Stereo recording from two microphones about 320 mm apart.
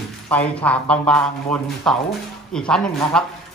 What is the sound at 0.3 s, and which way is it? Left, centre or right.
A woman's voice, centre.